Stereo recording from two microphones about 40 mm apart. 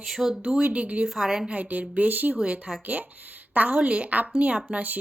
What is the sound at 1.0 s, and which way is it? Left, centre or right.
Speech, centre.